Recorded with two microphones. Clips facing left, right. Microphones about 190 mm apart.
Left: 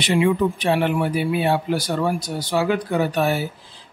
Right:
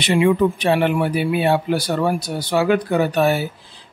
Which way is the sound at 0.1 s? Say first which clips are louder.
Right 3 dB; 65° right (ahead or behind).